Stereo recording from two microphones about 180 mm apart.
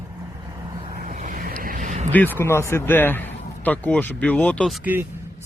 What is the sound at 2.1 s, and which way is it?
Speech, 10° left (ahead or behind).